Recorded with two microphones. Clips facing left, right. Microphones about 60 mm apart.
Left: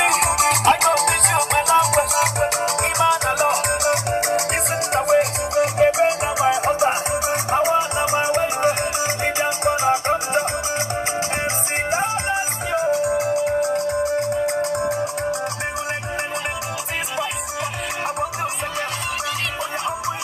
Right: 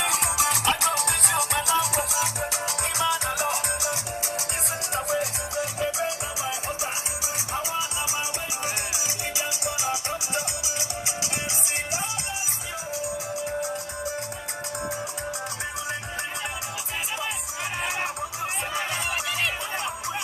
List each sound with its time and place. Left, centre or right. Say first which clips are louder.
0.0 s music: left 8 dB; left
11.9 s music: left 10 dB; left